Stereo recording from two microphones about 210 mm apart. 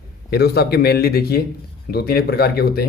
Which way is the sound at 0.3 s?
50° left (ahead or behind).